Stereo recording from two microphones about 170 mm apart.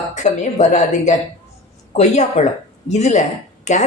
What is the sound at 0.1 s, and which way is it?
Speech, 45° left (ahead or behind).